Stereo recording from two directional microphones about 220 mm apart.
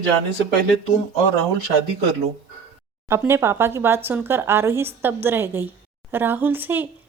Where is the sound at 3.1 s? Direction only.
10° right (ahead or behind).